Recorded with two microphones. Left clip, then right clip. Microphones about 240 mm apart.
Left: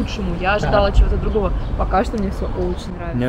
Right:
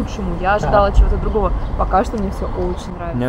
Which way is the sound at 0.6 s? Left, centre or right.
Right.